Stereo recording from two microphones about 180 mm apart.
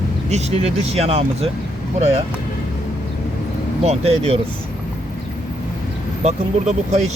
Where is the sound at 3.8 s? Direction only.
35° right (ahead or behind).